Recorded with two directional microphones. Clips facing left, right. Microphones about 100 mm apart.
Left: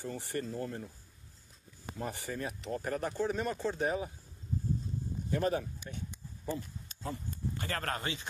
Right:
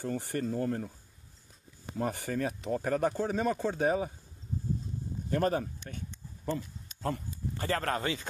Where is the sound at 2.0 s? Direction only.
60° right (ahead or behind); by 3.9 s 90° right.